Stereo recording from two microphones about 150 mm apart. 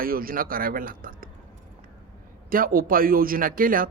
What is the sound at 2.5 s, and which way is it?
A man's voice, 70° right (ahead or behind).